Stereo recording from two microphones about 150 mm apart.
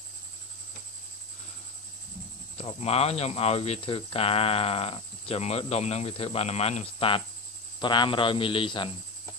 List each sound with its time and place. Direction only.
2.5 s speech: 40° left (ahead or behind)